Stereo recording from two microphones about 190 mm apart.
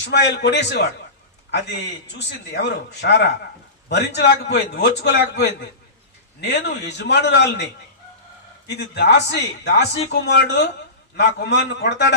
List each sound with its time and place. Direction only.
0.0 s a man's voice: 65° left (ahead or behind)